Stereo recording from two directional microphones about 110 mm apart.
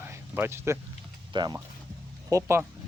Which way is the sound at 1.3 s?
40° right (ahead or behind).